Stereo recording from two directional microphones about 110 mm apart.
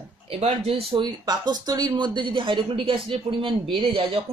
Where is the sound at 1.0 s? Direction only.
40° right (ahead or behind).